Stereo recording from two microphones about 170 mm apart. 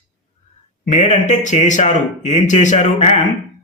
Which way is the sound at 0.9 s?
45° left (ahead or behind).